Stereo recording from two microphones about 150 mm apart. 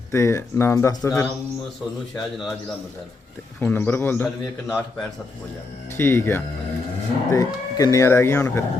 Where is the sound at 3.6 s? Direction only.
10° left (ahead or behind).